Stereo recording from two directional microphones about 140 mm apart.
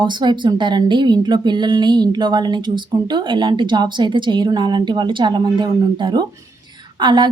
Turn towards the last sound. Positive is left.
turn(degrees=-30)  # may be behind; listen again after turning